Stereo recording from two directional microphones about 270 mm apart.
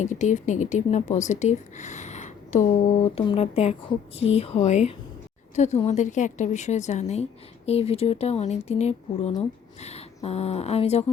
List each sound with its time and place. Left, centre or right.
0.0 s a woman's voice: left